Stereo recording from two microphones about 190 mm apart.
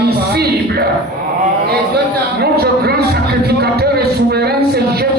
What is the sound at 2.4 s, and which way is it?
Speech, 55° right (ahead or behind).